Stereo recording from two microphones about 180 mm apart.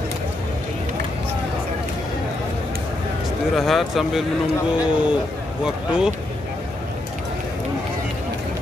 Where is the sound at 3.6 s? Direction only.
Centre (ahead or behind).